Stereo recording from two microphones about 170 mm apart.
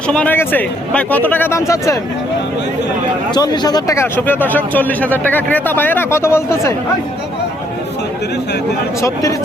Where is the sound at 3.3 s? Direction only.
25° left (ahead or behind).